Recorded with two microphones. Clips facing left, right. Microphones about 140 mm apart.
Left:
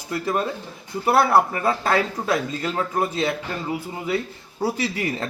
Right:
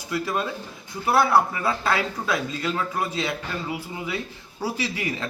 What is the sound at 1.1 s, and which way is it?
A man's voice, 50° left (ahead or behind).